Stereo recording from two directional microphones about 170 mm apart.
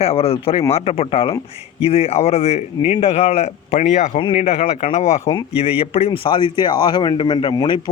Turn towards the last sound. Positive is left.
turn(degrees=25)  # may be behind; listen again after turning